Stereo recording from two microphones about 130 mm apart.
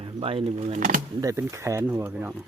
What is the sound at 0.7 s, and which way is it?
Speech, 85° right.